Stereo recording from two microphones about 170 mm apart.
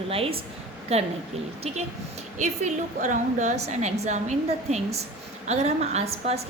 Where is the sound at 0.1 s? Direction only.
35° right (ahead or behind).